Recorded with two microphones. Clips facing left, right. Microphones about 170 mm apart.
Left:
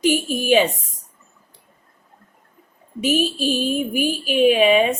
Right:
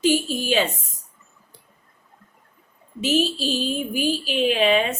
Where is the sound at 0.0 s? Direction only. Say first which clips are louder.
Left 1 dB; 15° left (ahead or behind).